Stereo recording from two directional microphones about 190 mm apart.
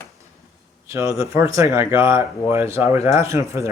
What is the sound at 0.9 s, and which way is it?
Speech, 15° right (ahead or behind).